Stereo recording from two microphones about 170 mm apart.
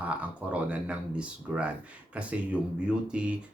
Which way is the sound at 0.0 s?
10° right (ahead or behind).